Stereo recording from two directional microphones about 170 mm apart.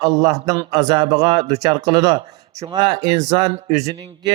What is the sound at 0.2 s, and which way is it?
Speech, 20° right (ahead or behind).